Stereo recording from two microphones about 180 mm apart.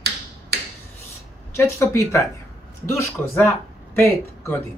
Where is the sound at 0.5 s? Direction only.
65° right (ahead or behind).